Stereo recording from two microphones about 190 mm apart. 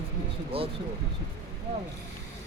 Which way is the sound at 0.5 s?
30° right (ahead or behind).